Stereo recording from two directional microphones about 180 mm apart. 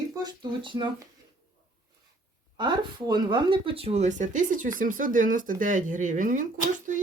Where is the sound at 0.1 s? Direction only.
25° right (ahead or behind).